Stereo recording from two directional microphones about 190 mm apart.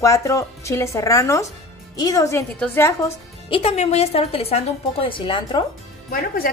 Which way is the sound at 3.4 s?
30° left (ahead or behind).